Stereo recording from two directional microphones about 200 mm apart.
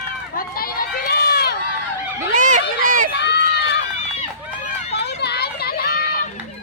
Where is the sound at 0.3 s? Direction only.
45° left (ahead or behind).